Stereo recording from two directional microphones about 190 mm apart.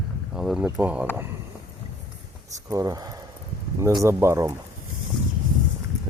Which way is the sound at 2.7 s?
20° right (ahead or behind).